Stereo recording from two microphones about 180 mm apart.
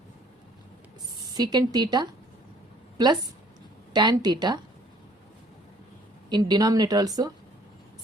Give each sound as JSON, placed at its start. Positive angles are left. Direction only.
{"t": 1.3, "sound": "speech", "side_deg": -25}
{"t": 3.9, "sound": "speech", "side_deg": -25}
{"t": 6.3, "sound": "speech", "side_deg": -20}